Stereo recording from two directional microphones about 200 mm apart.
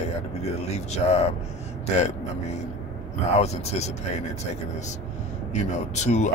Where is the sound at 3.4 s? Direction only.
35° left (ahead or behind).